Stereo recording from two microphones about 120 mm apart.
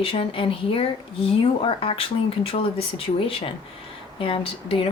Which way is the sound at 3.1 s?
45° left (ahead or behind).